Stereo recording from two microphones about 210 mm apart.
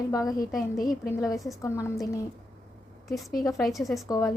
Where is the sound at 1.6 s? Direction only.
15° left (ahead or behind).